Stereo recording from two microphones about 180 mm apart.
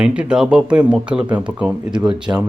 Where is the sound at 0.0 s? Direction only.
5° right (ahead or behind).